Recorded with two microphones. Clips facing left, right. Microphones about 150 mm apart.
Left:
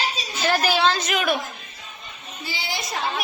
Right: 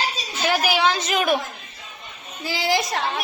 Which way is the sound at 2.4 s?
90° right.